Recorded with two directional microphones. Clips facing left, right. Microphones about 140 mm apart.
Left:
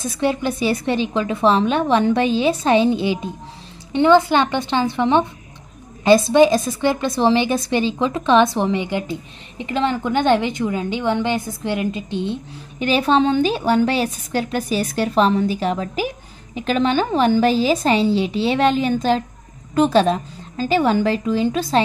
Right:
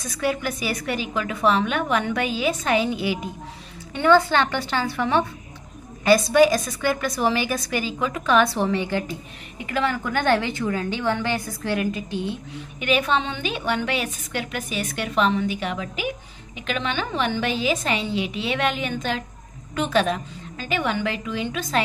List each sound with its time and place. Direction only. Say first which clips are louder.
0.0 s a woman's voice: left 5 dB; 25° left (ahead or behind)